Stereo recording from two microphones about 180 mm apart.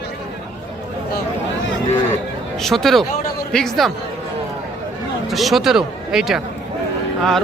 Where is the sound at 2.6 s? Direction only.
Centre (ahead or behind).